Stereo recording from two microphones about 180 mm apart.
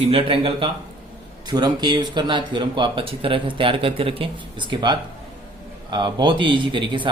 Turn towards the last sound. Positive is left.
turn(degrees=-25)  # may be behind; listen again after turning